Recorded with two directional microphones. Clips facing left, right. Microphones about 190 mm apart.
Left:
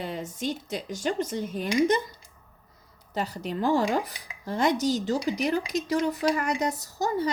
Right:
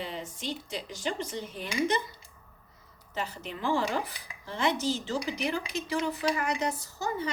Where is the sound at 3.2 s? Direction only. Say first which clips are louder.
Left 6 dB; 40° left (ahead or behind).